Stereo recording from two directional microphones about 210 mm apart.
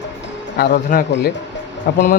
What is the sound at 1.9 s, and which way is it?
Speech, 50° left (ahead or behind).